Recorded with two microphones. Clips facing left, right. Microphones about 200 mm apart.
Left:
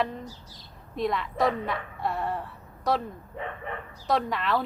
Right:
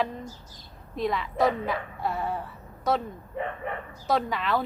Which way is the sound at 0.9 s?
Centre (ahead or behind).